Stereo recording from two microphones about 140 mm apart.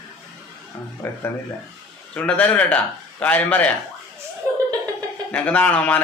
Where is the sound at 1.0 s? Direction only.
15° left (ahead or behind).